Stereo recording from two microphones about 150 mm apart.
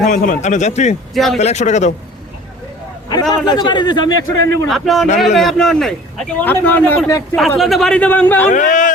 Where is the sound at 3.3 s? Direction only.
30° left (ahead or behind).